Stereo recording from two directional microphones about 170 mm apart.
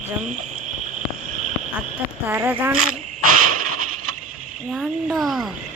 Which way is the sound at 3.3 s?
50° right (ahead or behind).